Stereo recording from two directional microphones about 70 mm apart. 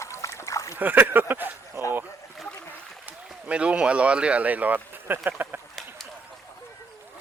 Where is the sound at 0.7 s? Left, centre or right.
Right.